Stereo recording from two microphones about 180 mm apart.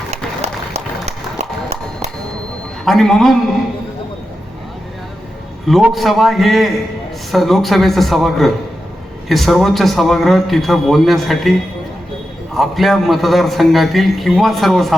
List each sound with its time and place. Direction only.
0.1 s a sound: 35° right (ahead or behind)
2.8 s a man's voice: centre (ahead or behind)
5.6 s a man's voice: centre (ahead or behind)
12.5 s a man's voice: centre (ahead or behind)